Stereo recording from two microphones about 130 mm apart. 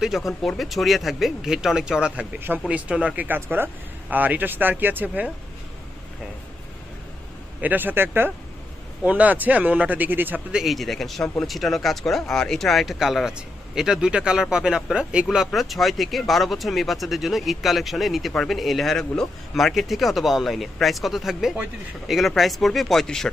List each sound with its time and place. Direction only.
0.3 s speech: centre (ahead or behind)
7.6 s speech: 15° right (ahead or behind)
10.6 s speech: centre (ahead or behind)